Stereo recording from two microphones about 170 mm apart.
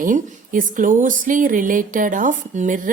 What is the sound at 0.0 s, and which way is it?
Speech, 50° right (ahead or behind).